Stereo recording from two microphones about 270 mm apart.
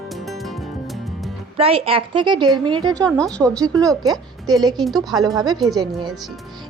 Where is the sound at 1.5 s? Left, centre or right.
Right.